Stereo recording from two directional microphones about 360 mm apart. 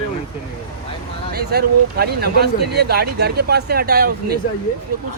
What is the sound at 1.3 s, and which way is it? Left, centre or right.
Speech, right.